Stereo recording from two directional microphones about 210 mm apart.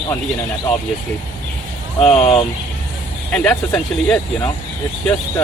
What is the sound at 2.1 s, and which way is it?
Speech, 30° left (ahead or behind).